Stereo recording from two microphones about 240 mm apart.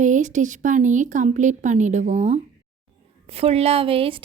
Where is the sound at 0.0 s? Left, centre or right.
Right.